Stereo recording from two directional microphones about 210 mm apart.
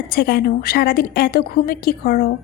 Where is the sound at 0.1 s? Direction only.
45° left (ahead or behind).